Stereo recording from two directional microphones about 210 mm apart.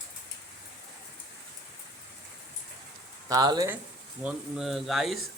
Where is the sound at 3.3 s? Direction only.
15° right (ahead or behind).